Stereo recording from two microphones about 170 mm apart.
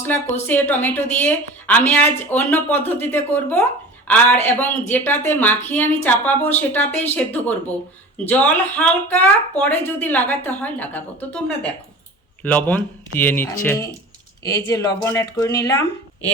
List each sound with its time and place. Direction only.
0.0 s speech: 10° left (ahead or behind)